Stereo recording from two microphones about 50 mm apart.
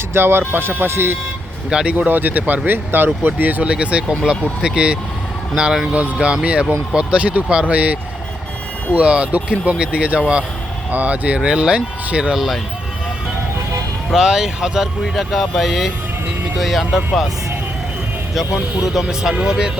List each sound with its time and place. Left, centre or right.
0.1 s speech: right
1.7 s speech: right
3.6 s speech: right
9.0 s speech: right
11.3 s speech: centre
14.1 s speech: centre
18.9 s speech: centre